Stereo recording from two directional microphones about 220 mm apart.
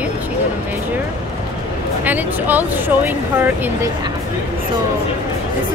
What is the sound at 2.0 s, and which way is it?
Speech, 5° right (ahead or behind).